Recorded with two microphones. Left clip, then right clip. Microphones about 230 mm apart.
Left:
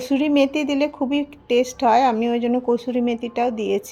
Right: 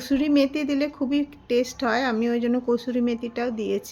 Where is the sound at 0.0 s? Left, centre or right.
Centre.